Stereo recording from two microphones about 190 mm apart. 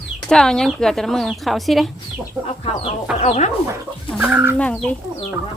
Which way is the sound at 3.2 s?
35° left (ahead or behind).